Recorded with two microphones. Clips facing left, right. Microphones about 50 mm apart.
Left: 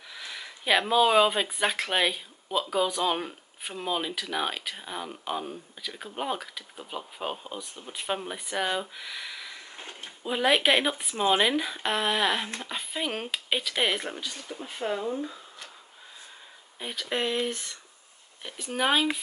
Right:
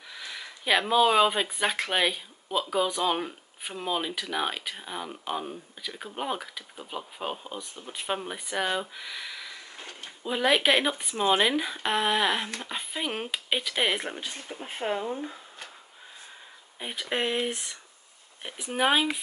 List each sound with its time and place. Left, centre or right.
0.1 s speech: centre
14.7 s speech: right
15.0 s speech: centre
15.2 s a sound: right
16.8 s speech: centre